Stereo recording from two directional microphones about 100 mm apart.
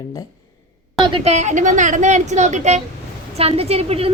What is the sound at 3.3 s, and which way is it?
Speech, 90° right.